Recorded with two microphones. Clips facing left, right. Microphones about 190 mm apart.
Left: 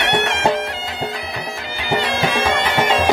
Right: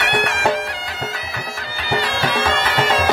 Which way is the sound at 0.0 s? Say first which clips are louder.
Left 2 dB; 20° left (ahead or behind).